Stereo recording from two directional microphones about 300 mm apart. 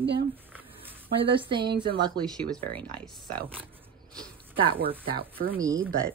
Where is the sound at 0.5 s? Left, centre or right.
Centre.